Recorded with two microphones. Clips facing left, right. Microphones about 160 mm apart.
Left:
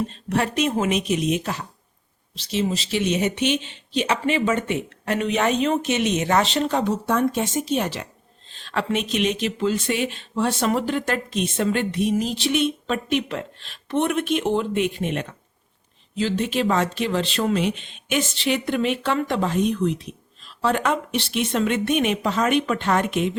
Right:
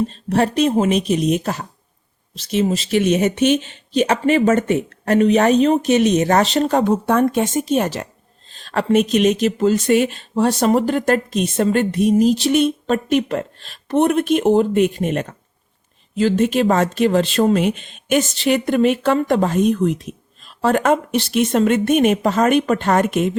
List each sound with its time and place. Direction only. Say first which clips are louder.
0.1 s speech: right 6 dB; 35° right (ahead or behind)